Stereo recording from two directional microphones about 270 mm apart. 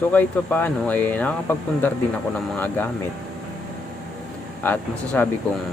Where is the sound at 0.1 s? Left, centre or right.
Centre.